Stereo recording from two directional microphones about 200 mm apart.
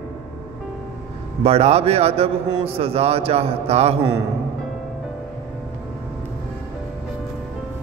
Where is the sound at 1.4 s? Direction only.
30° right (ahead or behind).